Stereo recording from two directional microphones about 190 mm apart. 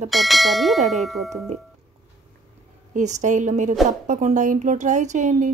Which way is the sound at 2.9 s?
40° right (ahead or behind).